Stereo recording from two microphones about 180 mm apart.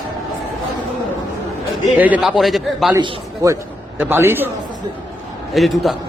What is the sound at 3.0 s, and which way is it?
A man's voice, 20° right (ahead or behind).